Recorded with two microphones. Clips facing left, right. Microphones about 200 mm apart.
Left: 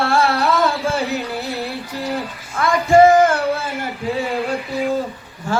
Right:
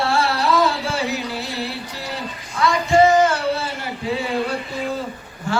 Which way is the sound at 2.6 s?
50° left (ahead or behind).